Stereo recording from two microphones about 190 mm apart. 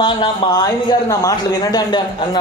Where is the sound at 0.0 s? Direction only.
25° left (ahead or behind).